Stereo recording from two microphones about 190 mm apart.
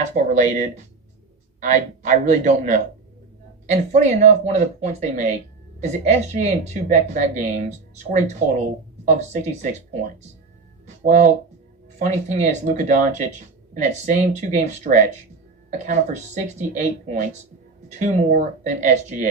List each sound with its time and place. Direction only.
0.3 s speech: 40° right (ahead or behind)
10.8 s speech: 40° right (ahead or behind)